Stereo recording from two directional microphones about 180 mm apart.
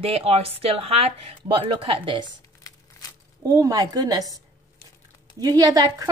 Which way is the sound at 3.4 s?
20° right (ahead or behind).